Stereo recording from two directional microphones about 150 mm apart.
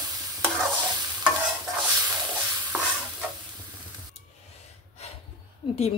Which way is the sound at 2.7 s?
10° right (ahead or behind).